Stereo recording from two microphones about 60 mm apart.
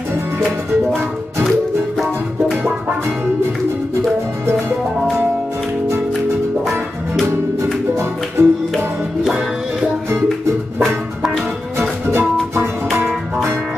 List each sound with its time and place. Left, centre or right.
8.4 s music: right
8.7 s music: centre
12.1 s music: right